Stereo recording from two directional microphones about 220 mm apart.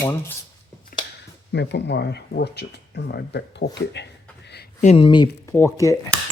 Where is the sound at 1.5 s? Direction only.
50° left (ahead or behind).